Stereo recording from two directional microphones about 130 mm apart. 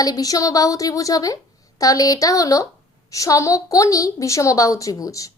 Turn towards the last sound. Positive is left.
turn(degrees=25)  # may be behind; listen again after turning